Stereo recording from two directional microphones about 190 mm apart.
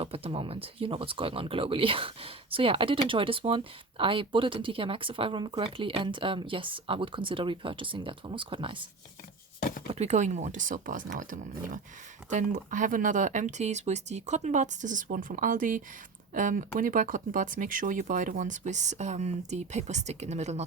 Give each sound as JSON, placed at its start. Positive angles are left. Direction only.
{"t": 0.0, "sound": "speech", "side_deg": -30}
{"t": 9.6, "sound": "chopping", "side_deg": 45}
{"t": 9.9, "sound": "speech", "side_deg": -35}